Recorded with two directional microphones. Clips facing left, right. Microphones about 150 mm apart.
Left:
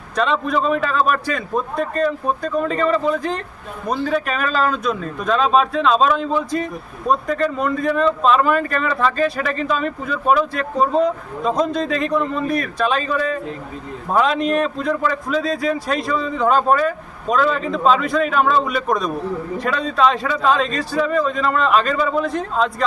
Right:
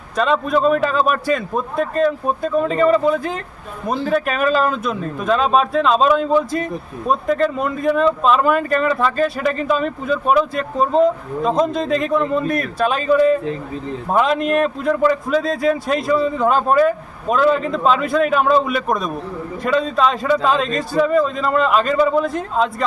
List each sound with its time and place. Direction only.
0.2 s a man's voice: centre (ahead or behind)
14.1 s a man's voice: 5° right (ahead or behind)